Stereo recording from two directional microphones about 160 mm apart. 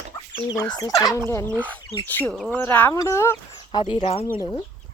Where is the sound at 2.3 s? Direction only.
Centre (ahead or behind).